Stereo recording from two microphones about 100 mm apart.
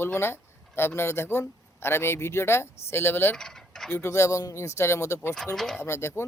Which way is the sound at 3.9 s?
25° left (ahead or behind).